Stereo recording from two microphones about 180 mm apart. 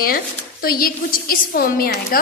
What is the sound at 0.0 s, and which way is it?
A woman's voice, 55° left (ahead or behind).